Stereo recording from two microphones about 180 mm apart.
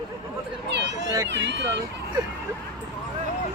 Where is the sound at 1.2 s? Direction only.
75° right (ahead or behind).